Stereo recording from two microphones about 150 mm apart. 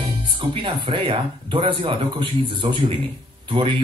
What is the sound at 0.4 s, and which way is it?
Speech, 35° right (ahead or behind).